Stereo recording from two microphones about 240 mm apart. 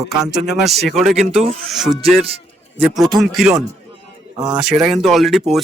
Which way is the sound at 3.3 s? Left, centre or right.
Centre.